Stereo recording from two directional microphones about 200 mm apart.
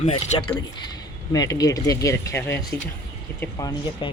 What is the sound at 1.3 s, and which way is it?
Speech, 20° left (ahead or behind).